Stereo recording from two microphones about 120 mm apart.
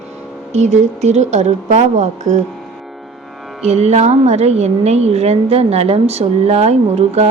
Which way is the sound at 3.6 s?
65° right (ahead or behind).